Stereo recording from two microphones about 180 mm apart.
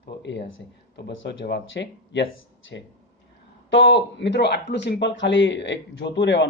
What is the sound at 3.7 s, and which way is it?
Speech, 80° left.